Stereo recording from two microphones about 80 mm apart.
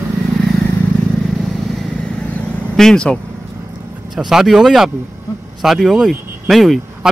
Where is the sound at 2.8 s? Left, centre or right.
Centre.